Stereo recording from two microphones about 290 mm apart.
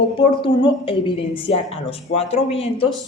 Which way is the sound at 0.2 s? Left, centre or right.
Centre.